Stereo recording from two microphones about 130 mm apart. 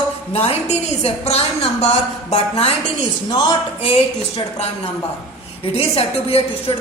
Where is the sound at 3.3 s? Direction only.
35° left (ahead or behind).